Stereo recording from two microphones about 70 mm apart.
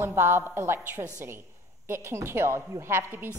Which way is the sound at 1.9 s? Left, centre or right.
Right.